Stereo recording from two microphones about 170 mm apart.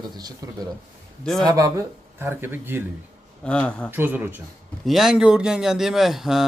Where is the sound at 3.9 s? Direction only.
10° right (ahead or behind).